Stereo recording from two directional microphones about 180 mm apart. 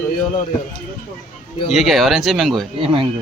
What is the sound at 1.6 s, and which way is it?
Speech, centre (ahead or behind).